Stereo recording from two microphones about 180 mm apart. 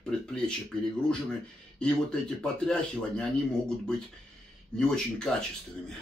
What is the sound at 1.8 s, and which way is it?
A man's voice, 5° left (ahead or behind).